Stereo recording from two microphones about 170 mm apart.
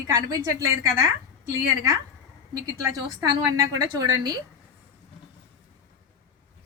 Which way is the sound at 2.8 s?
20° right (ahead or behind).